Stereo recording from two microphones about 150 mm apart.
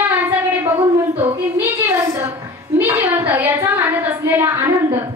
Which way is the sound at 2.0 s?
20° right (ahead or behind).